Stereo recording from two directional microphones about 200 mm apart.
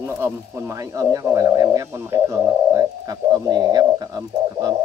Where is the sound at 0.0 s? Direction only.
10° right (ahead or behind).